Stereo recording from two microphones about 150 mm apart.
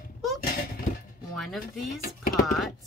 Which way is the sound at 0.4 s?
75° left (ahead or behind).